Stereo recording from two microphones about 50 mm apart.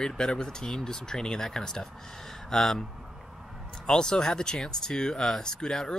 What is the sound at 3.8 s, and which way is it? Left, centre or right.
Speech, centre.